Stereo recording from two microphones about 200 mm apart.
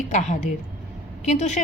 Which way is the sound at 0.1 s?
35° left (ahead or behind).